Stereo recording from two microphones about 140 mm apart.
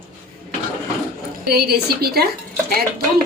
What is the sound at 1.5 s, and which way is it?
Speech, 90° right.